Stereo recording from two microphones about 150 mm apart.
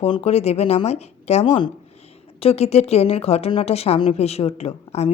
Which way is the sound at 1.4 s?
30° left (ahead or behind).